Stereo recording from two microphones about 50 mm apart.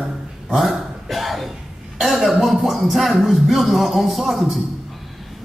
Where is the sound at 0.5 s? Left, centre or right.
Centre.